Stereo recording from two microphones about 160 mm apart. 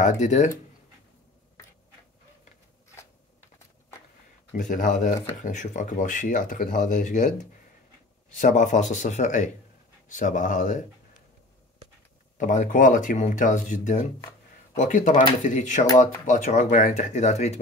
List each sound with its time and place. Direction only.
0.0 s speech: 45° left (ahead or behind)
4.5 s speech: 55° left (ahead or behind)
12.4 s speech: 50° left (ahead or behind)